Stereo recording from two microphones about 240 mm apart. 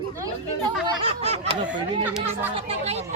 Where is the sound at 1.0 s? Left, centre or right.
Right.